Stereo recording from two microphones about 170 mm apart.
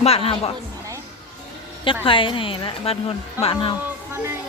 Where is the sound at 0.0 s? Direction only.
35° left (ahead or behind).